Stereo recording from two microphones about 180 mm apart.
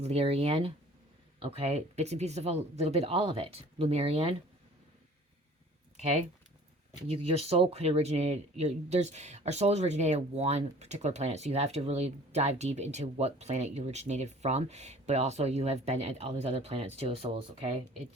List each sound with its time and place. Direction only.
0.0 s speech: 35° right (ahead or behind)
6.0 s speech: 40° right (ahead or behind)